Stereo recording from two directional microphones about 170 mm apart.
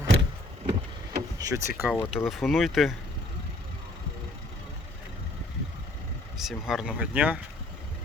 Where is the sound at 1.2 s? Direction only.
20° right (ahead or behind).